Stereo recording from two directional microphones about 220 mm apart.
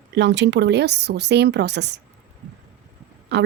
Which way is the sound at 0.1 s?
55° right (ahead or behind).